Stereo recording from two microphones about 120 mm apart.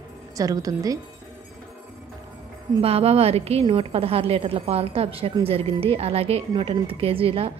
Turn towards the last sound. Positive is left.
turn(degrees=-50)  # may be behind; listen again after turning